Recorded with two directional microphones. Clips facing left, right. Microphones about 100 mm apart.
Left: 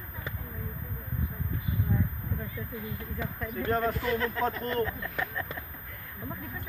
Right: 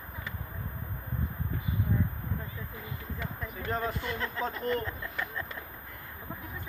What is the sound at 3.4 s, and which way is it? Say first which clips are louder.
Speech: left 5 dB; 5° right (ahead or behind).